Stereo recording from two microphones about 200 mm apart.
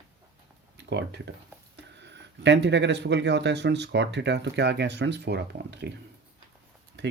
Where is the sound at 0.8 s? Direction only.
60° right (ahead or behind).